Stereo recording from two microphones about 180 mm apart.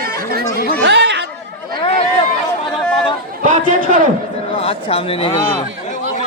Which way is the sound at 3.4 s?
50° right (ahead or behind).